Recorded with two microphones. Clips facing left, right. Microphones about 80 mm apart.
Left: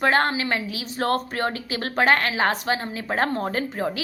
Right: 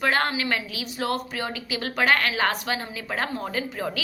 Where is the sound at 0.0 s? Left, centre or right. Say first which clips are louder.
Left 3 dB; left.